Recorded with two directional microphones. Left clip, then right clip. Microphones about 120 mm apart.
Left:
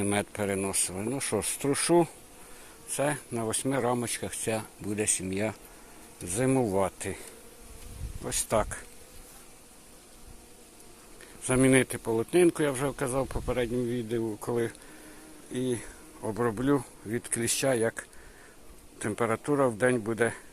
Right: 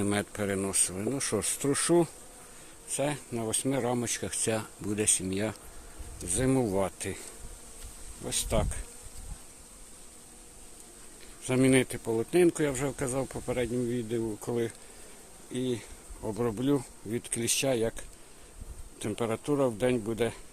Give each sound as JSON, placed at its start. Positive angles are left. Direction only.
{"t": 0.0, "sound": "speech", "side_deg": -25}
{"t": 2.9, "sound": "speech", "side_deg": -5}
{"t": 6.2, "sound": "speech", "side_deg": -15}
{"t": 8.2, "sound": "speech", "side_deg": -5}
{"t": 11.4, "sound": "speech", "side_deg": -5}